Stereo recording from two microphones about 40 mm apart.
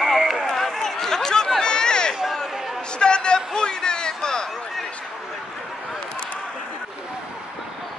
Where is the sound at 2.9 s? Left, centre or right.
Left.